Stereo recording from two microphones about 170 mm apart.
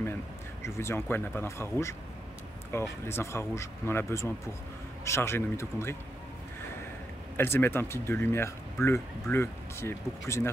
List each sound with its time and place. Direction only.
0.0 s speech: 15° left (ahead or behind)
7.3 s speech: 15° left (ahead or behind)